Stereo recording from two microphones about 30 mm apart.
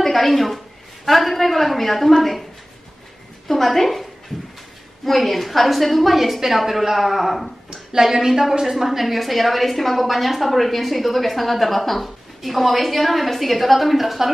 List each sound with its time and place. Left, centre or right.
0.0 s a woman's voice: centre
3.4 s a woman's voice: centre
7.7 s a woman's voice: centre